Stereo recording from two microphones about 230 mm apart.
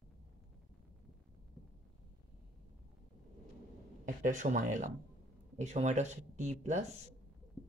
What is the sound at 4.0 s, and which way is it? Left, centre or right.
Speech, right.